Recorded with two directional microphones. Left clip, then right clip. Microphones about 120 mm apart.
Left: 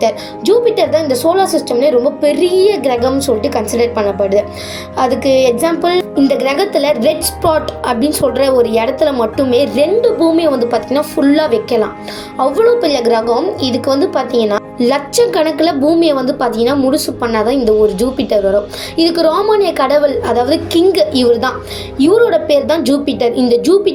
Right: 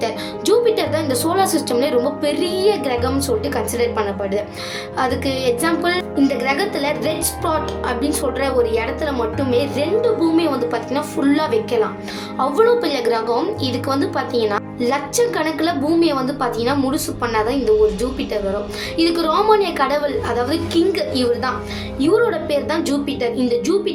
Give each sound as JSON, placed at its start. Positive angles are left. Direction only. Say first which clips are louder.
{"t": 0.4, "sound": "a woman's voice", "louder": "left 5 dB", "side_deg": 10}
{"t": 6.2, "sound": "a woman's voice", "louder": "left 4 dB", "side_deg": 30}
{"t": 18.9, "sound": "a woman's voice", "louder": "left 6 dB", "side_deg": 20}